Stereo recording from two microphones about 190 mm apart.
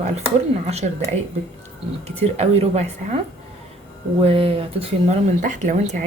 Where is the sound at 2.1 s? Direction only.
35° right (ahead or behind).